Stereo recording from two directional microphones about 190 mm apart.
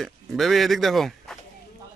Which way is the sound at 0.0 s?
Centre (ahead or behind).